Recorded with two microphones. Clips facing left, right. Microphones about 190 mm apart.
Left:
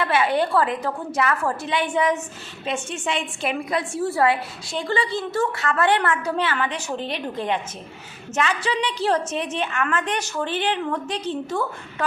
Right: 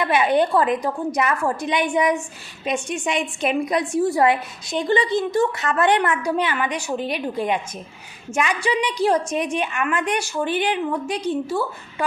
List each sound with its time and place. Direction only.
0.0 s a woman's voice: 15° right (ahead or behind)